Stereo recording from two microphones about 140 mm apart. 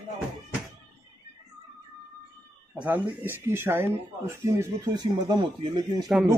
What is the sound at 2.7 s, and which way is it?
Speech, 10° right (ahead or behind).